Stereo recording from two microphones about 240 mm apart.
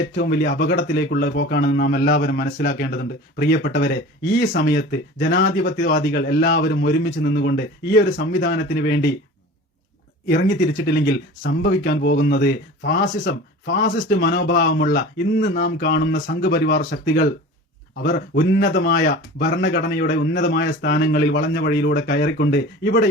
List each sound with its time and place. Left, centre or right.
0.0 s speech: left
10.4 s speech: left